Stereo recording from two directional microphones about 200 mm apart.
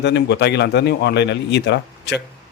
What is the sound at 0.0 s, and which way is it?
Speech, 60° left (ahead or behind).